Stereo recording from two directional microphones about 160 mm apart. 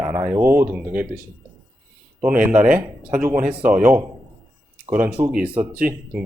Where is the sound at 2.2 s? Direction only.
10° right (ahead or behind).